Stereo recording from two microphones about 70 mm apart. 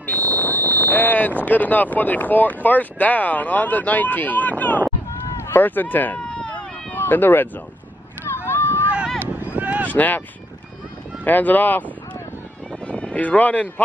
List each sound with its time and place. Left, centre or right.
0.0 s speech: left
6.1 s a sound: centre
6.9 s speech: left
8.4 s run: left
9.2 s a sound: right
9.8 s speech: left
11.2 s speech: left